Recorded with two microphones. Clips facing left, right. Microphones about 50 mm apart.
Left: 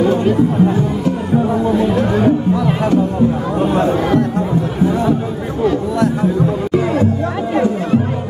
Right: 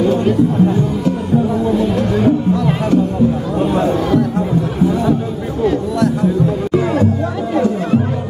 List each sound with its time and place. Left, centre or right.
0.0 s speech: centre
1.3 s music: centre
3.5 s chatter: centre
5.9 s music: centre